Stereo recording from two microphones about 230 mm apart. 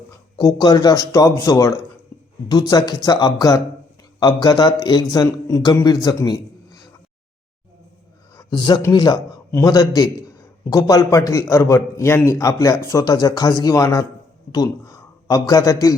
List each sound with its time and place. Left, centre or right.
0.3 s speech: centre
2.1 s a sound: centre
2.5 s speech: centre
8.4 s a man's voice: centre